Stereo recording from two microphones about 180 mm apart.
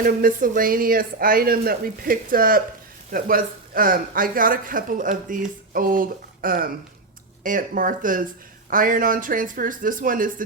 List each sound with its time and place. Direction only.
0.0 s speech: 50° right (ahead or behind)